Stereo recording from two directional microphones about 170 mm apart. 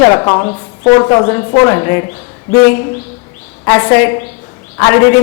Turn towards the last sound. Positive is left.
turn(degrees=15)  # may be behind; listen again after turning